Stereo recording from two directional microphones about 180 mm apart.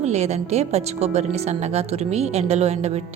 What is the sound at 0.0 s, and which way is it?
A woman's voice, 40° right (ahead or behind).